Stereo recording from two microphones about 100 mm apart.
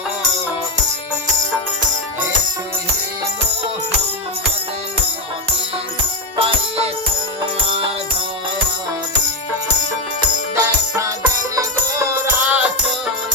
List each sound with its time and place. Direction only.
6.4 s music: 90° right
10.5 s music: 30° right (ahead or behind)